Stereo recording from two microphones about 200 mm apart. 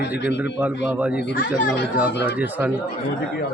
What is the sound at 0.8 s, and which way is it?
Speech, 5° right (ahead or behind).